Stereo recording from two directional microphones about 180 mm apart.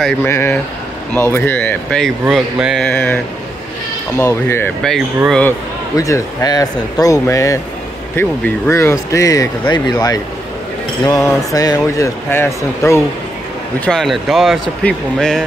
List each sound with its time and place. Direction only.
0.2 s a man's voice: 15° left (ahead or behind)
4.2 s a man's voice: 15° left (ahead or behind)
5.9 s a man's voice: 20° left (ahead or behind)
13.7 s speech: 5° left (ahead or behind)